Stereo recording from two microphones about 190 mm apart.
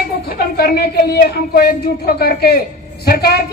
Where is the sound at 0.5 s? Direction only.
55° left (ahead or behind).